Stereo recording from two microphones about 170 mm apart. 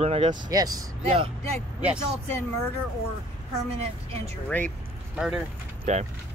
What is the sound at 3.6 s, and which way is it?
Speech, 40° right (ahead or behind).